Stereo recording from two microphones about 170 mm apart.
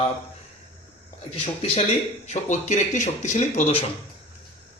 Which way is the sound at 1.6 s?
35° left (ahead or behind).